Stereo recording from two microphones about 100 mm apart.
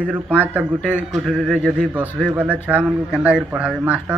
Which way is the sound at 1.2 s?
Centre (ahead or behind).